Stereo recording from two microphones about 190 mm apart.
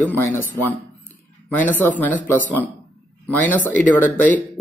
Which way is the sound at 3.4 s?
10° left (ahead or behind).